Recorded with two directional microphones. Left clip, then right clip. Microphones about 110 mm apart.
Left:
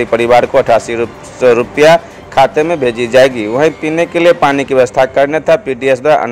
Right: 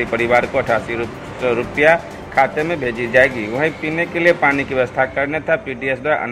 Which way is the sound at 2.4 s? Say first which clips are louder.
Left 10 dB; 35° left (ahead or behind).